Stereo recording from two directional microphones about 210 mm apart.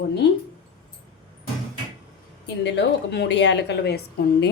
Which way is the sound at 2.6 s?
55° left (ahead or behind).